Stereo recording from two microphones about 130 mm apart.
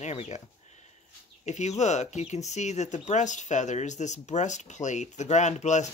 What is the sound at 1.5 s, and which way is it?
Speech, 60° left (ahead or behind).